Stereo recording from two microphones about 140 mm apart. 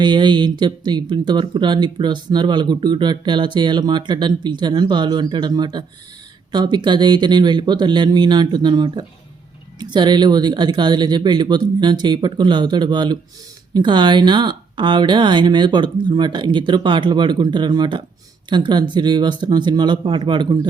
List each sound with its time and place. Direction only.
0.0 s speech: 35° right (ahead or behind)